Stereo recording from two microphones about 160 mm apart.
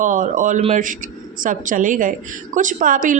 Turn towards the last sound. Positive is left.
turn(degrees=-55)  # may be behind; listen again after turning